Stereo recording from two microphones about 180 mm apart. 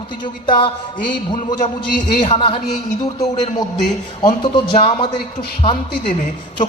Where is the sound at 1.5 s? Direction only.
45° left (ahead or behind).